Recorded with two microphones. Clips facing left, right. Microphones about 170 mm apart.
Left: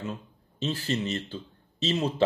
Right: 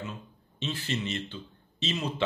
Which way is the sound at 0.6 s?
35° left (ahead or behind).